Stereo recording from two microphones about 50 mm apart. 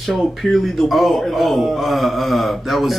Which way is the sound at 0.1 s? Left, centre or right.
Centre.